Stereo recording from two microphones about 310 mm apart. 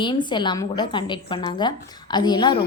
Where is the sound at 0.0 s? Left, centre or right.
Centre.